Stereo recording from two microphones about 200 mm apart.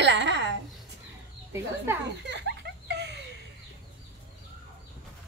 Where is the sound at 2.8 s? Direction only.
60° right (ahead or behind).